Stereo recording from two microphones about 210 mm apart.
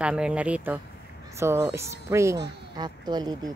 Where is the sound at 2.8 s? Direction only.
20° right (ahead or behind).